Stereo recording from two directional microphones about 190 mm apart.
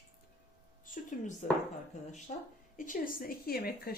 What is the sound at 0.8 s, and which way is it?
Speech, 45° left (ahead or behind).